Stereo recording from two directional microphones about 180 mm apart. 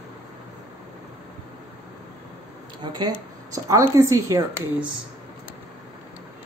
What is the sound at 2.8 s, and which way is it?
A woman's voice, 25° right (ahead or behind).